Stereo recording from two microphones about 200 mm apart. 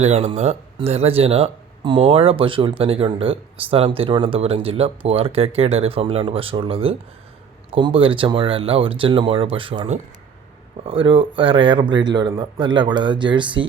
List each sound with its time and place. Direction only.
0.0 s speech: 30° right (ahead or behind)